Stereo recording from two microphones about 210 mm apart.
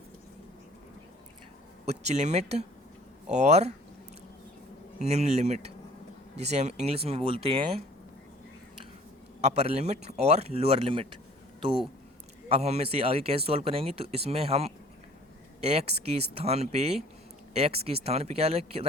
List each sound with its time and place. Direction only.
1.8 s speech: 30° right (ahead or behind)
4.9 s speech: 30° right (ahead or behind)
9.4 s speech: 30° right (ahead or behind)
12.5 s speech: 30° right (ahead or behind)